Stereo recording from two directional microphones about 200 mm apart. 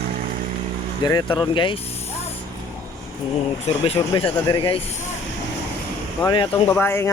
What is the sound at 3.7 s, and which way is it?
Speech, 30° left (ahead or behind).